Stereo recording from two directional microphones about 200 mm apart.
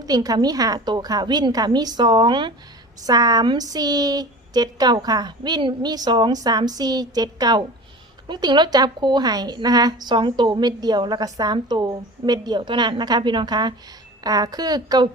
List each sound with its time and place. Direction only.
0.0 s a woman's voice: 20° right (ahead or behind)